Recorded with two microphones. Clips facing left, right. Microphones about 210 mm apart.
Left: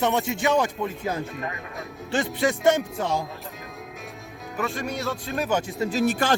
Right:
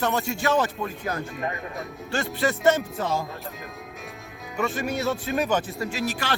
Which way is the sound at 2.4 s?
15° left (ahead or behind).